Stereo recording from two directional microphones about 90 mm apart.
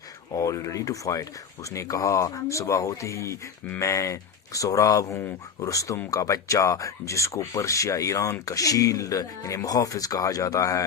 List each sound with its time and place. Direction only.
0.3 s speech: 35° left (ahead or behind)